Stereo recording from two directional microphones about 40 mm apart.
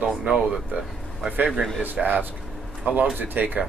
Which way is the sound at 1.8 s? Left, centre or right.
Right.